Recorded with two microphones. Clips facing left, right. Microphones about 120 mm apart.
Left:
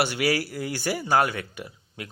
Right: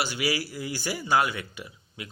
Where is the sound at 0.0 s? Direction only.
60° left (ahead or behind).